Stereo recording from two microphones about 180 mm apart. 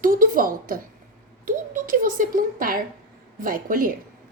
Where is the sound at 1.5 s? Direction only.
50° right (ahead or behind).